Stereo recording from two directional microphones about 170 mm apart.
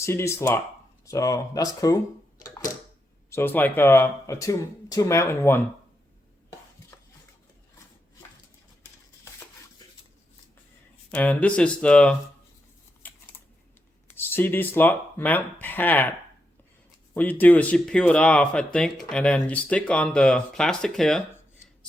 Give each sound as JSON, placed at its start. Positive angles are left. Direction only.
{"t": 0.0, "sound": "speech", "side_deg": 15}
{"t": 3.2, "sound": "speech", "side_deg": 15}
{"t": 11.1, "sound": "speech", "side_deg": 10}
{"t": 14.1, "sound": "speech", "side_deg": 10}
{"t": 17.2, "sound": "speech", "side_deg": 10}